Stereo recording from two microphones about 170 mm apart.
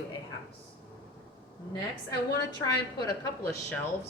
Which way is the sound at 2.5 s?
25° left (ahead or behind).